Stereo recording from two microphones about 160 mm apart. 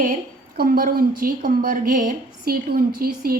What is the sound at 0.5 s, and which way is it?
A woman's voice, 65° right (ahead or behind).